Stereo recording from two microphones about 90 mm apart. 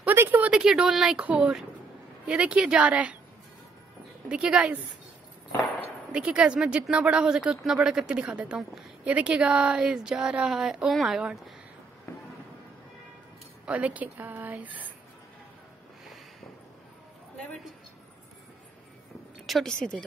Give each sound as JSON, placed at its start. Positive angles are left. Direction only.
{"t": 0.0, "sound": "a sound", "side_deg": -25}
{"t": 0.5, "sound": "speech", "side_deg": -10}
{"t": 4.3, "sound": "speech", "side_deg": -10}
{"t": 6.1, "sound": "speech", "side_deg": -10}
{"t": 12.1, "sound": "fireworks", "side_deg": 30}
{"t": 13.7, "sound": "speech", "side_deg": -15}
{"t": 19.4, "sound": "speech", "side_deg": 5}